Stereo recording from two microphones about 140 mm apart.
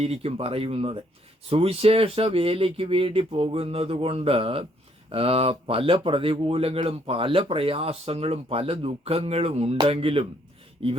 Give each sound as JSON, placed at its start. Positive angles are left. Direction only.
{"t": 0.0, "sound": "speech", "side_deg": -45}